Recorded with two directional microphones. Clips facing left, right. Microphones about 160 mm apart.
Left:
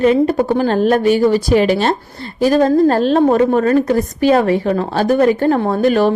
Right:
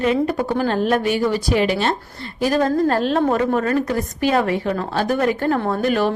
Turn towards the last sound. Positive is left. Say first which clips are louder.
# left 6 dB
turn(degrees=30)  # may be behind; listen again after turning